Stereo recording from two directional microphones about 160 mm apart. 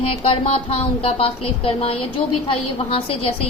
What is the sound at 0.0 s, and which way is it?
Speech, 35° left (ahead or behind).